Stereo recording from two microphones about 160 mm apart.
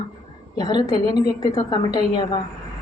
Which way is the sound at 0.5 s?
25° left (ahead or behind).